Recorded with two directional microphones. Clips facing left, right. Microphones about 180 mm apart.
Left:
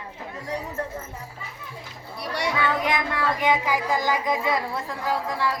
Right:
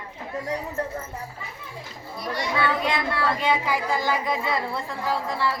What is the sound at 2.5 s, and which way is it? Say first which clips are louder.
Child singing: right 1 dB; 15° left (ahead or behind).